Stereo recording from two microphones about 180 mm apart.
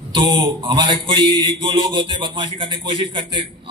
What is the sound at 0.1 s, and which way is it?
A man's voice, 25° right (ahead or behind).